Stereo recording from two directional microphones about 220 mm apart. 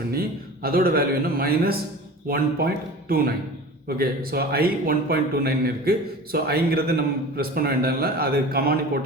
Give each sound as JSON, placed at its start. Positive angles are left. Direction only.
{"t": 0.1, "sound": "a man's voice", "side_deg": -45}